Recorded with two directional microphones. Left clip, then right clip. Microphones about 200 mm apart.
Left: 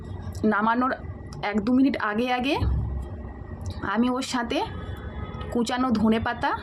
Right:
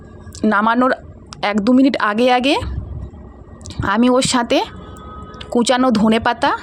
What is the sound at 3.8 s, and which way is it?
Speech, 45° right (ahead or behind).